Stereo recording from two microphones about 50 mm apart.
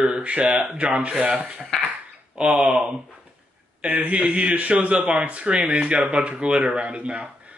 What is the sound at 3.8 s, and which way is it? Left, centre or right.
A man's voice, right.